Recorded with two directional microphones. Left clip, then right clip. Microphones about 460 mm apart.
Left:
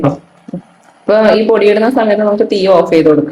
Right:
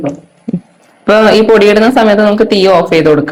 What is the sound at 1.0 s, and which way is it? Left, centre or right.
Speech, right.